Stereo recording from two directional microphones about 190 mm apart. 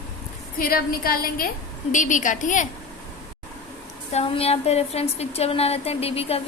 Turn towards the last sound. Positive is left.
turn(degrees=30)  # may be behind; listen again after turning